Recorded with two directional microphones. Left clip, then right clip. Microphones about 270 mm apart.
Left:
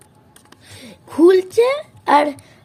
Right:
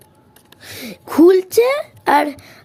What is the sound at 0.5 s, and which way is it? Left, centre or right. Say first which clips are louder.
A woman's voice: right 9 dB; right.